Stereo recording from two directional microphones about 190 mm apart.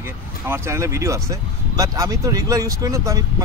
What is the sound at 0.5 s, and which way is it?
Speech, 15° right (ahead or behind).